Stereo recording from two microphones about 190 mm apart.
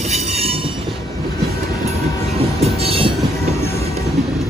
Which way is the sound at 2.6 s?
30° right (ahead or behind).